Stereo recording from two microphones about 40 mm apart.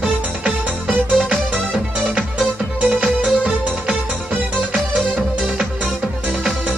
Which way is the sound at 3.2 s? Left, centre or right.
Right.